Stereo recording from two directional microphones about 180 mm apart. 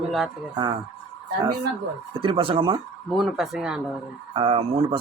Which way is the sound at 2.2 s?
30° right (ahead or behind).